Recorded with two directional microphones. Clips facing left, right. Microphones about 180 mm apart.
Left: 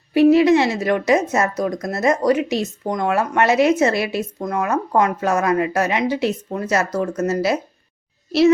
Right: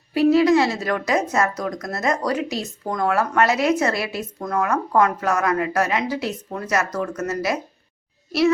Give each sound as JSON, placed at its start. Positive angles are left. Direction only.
{"t": 0.1, "sound": "speech", "side_deg": 25}